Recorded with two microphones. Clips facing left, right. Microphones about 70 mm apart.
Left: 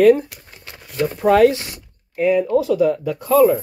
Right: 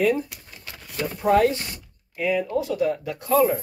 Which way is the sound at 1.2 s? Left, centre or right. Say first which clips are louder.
Left 6 dB; left.